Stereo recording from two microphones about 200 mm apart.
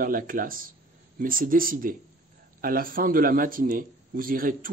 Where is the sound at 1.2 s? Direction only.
45° right (ahead or behind).